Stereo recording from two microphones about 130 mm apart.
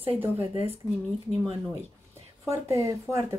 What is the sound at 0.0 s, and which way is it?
Speech, 45° right (ahead or behind).